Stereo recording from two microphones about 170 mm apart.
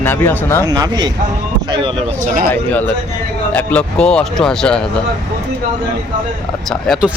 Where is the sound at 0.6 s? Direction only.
25° right (ahead or behind).